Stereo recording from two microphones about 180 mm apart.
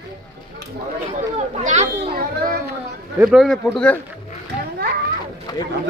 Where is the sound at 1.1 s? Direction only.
45° right (ahead or behind).